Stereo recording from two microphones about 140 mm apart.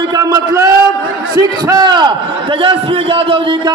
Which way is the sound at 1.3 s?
30° right (ahead or behind).